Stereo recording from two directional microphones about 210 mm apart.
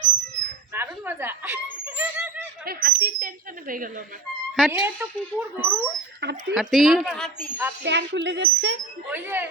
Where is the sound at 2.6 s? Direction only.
45° right (ahead or behind).